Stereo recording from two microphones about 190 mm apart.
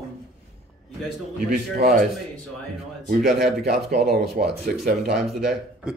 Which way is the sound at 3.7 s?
Centre (ahead or behind).